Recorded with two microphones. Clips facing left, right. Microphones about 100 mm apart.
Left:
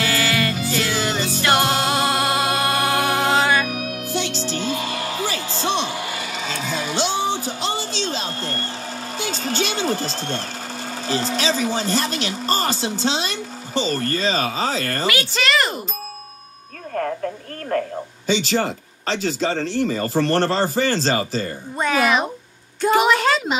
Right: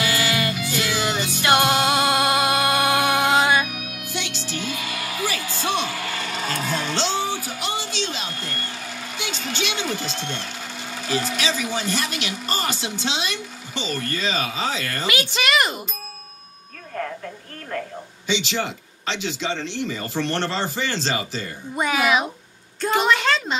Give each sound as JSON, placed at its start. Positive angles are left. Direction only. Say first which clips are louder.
{"t": 0.0, "sound": "music", "louder": "left 2 dB", "side_deg": 30}
{"t": 2.0, "sound": "music", "louder": "even", "side_deg": -20}
{"t": 2.4, "sound": "music", "louder": "even", "side_deg": 30}
{"t": 3.3, "sound": "music", "louder": "left 1 dB", "side_deg": -15}
{"t": 3.6, "sound": "music", "louder": "left 7 dB", "side_deg": 35}
{"t": 6.3, "sound": "music", "louder": "right 2 dB", "side_deg": -5}
{"t": 6.9, "sound": "music", "louder": "left 5 dB", "side_deg": 15}
{"t": 9.1, "sound": "speech", "louder": "left 5 dB", "side_deg": 40}
{"t": 15.3, "sound": "speech", "louder": "left 1 dB", "side_deg": -15}
{"t": 17.7, "sound": "a woman's voice", "louder": "left 7 dB", "side_deg": 40}
{"t": 21.7, "sound": "speech", "louder": "left 1 dB", "side_deg": -10}
{"t": 22.8, "sound": "a woman's voice", "louder": "left 3 dB", "side_deg": 5}